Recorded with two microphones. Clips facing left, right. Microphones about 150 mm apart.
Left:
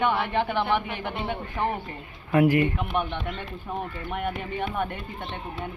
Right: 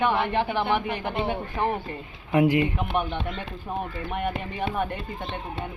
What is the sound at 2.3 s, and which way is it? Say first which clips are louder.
Speech: even; 20° right (ahead or behind).